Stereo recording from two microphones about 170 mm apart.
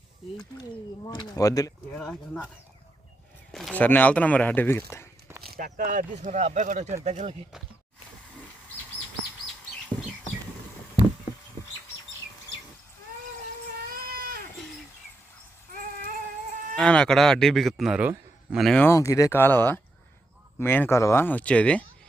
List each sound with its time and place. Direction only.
1.0 s speech: 25° left (ahead or behind)
2.0 s speech: 5° left (ahead or behind)
3.5 s speech: centre (ahead or behind)
5.4 s speech: 60° right (ahead or behind); by 7.3 s 40° right (ahead or behind)
13.9 s baby cry: 60° right (ahead or behind)
16.7 s speech: 5° left (ahead or behind)
18.9 s speech: 20° left (ahead or behind)
20.6 s speech: 10° left (ahead or behind)